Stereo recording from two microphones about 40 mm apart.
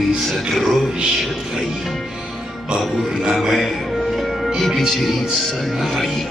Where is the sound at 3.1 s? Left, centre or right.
Centre.